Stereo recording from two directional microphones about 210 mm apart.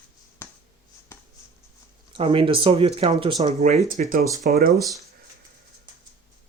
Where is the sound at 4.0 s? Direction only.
40° right (ahead or behind).